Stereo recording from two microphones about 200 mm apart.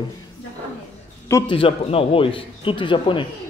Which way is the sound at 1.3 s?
25° left (ahead or behind).